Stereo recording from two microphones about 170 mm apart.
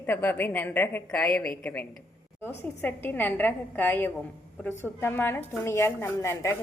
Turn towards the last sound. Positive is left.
turn(degrees=15)  # may be behind; listen again after turning